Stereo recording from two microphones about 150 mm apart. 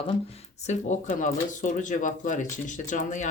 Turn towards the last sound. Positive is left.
turn(degrees=55)  # may be behind; listen again after turning